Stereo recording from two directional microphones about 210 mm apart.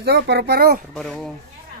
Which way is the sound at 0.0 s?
50° right (ahead or behind).